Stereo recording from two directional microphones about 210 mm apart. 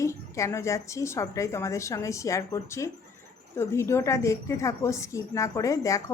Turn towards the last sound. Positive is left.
turn(degrees=15)  # may be behind; listen again after turning